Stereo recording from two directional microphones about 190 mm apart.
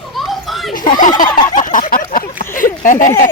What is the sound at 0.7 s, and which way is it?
Speech, 45° left (ahead or behind).